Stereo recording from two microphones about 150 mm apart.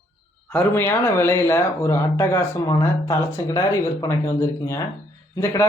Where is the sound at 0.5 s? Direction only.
15° left (ahead or behind).